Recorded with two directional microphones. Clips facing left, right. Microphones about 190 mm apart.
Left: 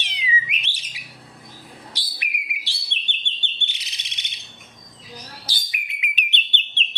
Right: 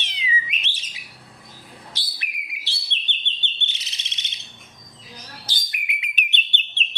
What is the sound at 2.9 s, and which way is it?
Chirp, 10° left (ahead or behind).